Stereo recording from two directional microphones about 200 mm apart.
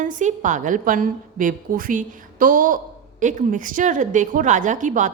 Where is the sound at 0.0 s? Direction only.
40° right (ahead or behind).